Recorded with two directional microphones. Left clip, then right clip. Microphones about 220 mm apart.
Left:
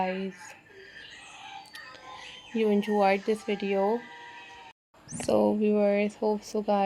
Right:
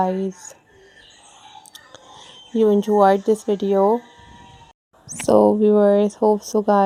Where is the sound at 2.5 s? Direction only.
40° right (ahead or behind).